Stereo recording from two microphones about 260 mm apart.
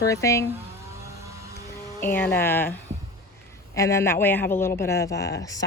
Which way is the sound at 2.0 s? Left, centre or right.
Centre.